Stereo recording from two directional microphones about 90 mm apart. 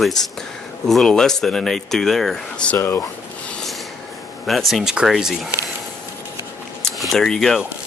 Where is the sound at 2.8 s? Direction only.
30° left (ahead or behind).